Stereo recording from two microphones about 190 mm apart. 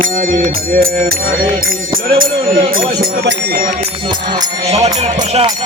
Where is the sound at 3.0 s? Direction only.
55° right (ahead or behind).